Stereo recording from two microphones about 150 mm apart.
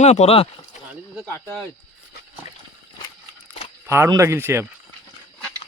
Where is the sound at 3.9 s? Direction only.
15° right (ahead or behind).